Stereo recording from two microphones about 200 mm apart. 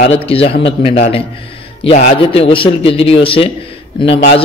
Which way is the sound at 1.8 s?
30° left (ahead or behind).